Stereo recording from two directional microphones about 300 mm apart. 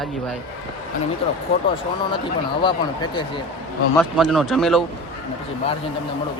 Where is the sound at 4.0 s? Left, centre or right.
Centre.